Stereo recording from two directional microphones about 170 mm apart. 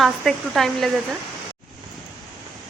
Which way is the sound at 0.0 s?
Centre (ahead or behind).